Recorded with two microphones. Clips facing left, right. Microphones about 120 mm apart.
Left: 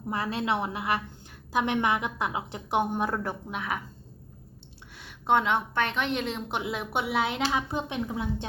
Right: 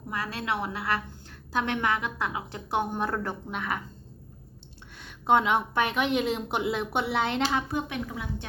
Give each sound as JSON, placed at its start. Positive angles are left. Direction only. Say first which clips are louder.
{"t": 0.1, "sound": "a woman's voice", "louder": "left 3 dB", "side_deg": 25}
{"t": 4.9, "sound": "a woman's voice", "louder": "right 1 dB", "side_deg": 0}
{"t": 7.7, "sound": "a woman's voice", "louder": "even", "side_deg": 25}